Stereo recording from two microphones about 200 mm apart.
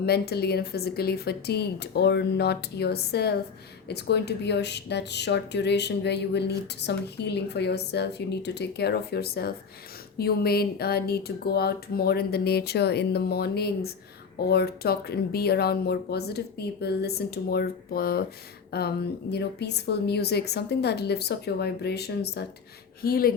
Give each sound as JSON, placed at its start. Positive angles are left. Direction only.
{"t": 0.0, "sound": "speech", "side_deg": 55}